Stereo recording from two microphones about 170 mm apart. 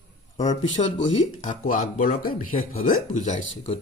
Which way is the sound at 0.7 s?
90° left.